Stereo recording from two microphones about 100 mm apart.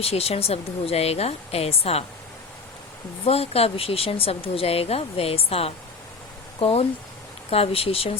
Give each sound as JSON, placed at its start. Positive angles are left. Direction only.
{"t": 0.0, "sound": "a woman's voice", "side_deg": 90}
{"t": 3.2, "sound": "speech", "side_deg": 90}